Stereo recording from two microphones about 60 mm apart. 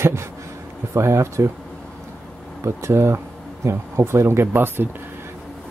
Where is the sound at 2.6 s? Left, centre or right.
Right.